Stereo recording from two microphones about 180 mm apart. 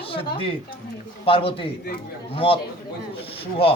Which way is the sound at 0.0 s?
30° left (ahead or behind).